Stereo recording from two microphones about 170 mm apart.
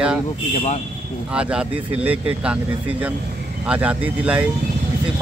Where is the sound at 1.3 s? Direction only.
5° right (ahead or behind).